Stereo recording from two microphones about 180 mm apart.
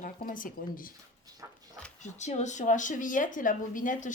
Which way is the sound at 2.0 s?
40° left (ahead or behind).